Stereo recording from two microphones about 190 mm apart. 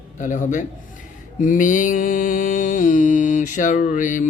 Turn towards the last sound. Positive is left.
turn(degrees=40)  # may be behind; listen again after turning